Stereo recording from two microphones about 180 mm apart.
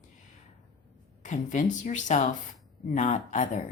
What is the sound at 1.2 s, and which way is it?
Speech, 45° left (ahead or behind).